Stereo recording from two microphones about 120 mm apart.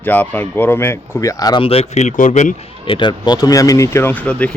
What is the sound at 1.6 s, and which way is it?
Speech, 55° left (ahead or behind).